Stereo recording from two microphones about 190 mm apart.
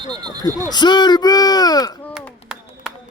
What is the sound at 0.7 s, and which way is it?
Speech, 20° left (ahead or behind).